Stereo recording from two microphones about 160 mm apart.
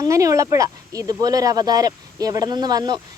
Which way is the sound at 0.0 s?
20° right (ahead or behind).